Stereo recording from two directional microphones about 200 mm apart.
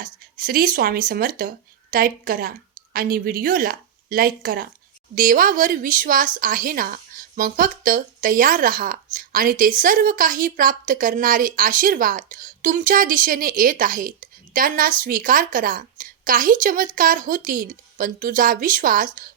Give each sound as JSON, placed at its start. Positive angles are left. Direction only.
{"t": 0.0, "sound": "speech", "side_deg": -45}